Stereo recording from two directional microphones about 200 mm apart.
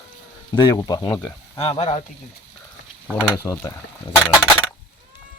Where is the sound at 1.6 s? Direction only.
30° left (ahead or behind).